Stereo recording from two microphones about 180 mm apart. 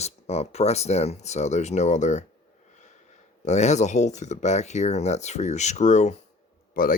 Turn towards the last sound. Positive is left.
turn(degrees=50)  # may be behind; listen again after turning